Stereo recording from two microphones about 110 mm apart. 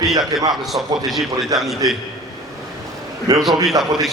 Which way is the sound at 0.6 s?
Centre (ahead or behind).